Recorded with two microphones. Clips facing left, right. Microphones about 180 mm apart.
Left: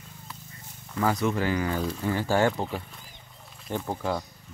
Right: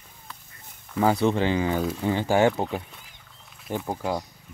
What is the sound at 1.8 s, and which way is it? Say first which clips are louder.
Speech: right 3 dB; 5° right (ahead or behind).